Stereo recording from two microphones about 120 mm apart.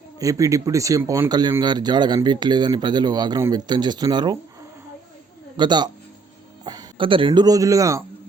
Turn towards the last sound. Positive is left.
turn(degrees=-25)  # may be behind; listen again after turning